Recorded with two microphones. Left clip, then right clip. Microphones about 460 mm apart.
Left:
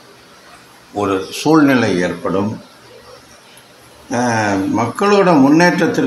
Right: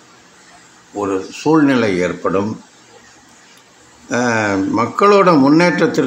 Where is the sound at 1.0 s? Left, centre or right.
Left.